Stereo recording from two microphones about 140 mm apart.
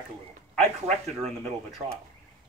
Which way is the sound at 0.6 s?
50° right (ahead or behind).